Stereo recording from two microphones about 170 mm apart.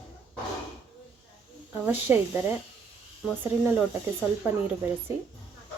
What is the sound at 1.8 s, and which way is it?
Speech, 15° right (ahead or behind).